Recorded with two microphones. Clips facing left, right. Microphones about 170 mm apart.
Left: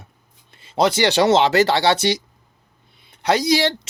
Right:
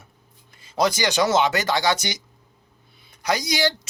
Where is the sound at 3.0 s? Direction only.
25° left (ahead or behind).